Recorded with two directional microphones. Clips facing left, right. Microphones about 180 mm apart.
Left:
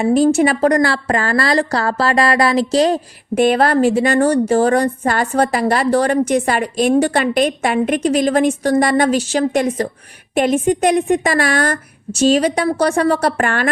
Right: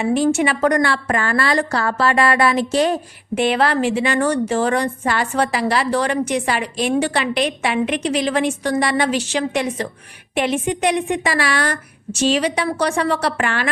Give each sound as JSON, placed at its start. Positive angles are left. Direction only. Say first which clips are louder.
{"t": 0.0, "sound": "a woman's voice", "louder": "left 4 dB", "side_deg": 35}